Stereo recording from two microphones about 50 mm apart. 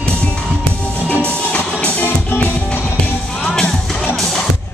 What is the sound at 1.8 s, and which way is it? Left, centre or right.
Music, left.